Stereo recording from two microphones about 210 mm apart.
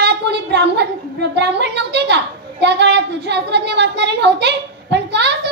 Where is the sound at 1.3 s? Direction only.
55° right (ahead or behind).